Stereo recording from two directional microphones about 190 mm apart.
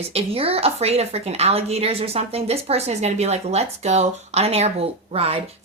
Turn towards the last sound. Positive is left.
turn(degrees=-30)  # may be behind; listen again after turning